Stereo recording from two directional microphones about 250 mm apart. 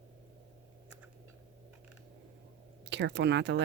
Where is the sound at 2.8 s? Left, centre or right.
Right.